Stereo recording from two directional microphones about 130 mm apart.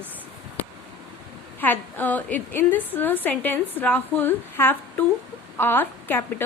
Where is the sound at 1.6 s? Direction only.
15° left (ahead or behind).